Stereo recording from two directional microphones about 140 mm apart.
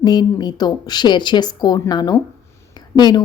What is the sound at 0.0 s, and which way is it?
Speech, 30° left (ahead or behind).